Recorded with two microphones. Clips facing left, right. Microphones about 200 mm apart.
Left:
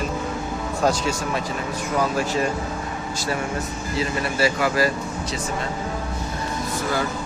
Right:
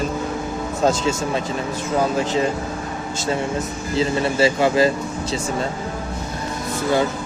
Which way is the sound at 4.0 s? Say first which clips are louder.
Right 5 dB; 25° right (ahead or behind).